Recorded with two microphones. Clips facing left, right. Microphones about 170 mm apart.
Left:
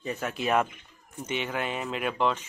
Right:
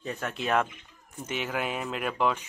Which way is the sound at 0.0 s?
Centre (ahead or behind).